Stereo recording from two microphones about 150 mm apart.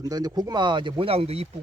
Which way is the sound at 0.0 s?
25° right (ahead or behind).